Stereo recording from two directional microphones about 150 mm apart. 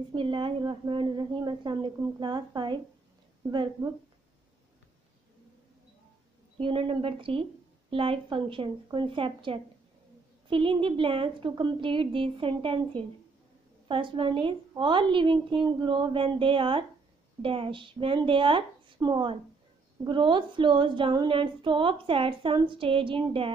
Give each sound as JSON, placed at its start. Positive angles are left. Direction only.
{"t": 0.1, "sound": "a woman's voice", "side_deg": -35}
{"t": 6.6, "sound": "speech", "side_deg": -35}